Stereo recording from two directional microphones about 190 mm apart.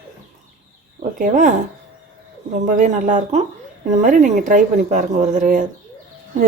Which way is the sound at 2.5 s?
45° right (ahead or behind).